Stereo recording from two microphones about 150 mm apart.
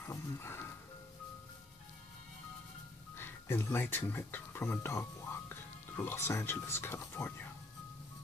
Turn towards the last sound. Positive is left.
turn(degrees=10)  # may be behind; listen again after turning